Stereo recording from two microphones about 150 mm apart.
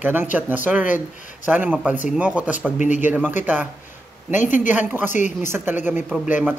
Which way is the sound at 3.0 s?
10° right (ahead or behind).